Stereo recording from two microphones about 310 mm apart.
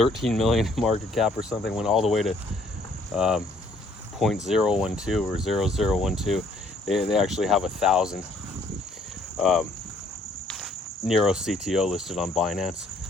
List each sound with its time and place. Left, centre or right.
0.0 s speech: centre
4.4 s speech: centre
9.4 s speech: centre
10.5 s cricket: centre